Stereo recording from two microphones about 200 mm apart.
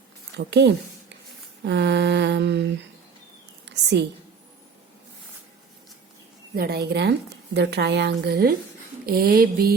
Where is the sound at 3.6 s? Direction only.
60° right (ahead or behind).